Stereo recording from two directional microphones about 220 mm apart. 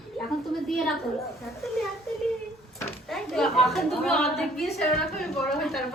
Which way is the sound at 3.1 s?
Centre (ahead or behind).